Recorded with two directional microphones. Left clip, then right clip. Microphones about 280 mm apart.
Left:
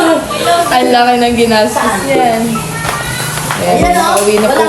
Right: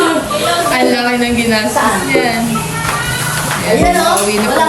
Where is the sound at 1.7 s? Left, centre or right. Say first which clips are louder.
Left 1 dB; centre.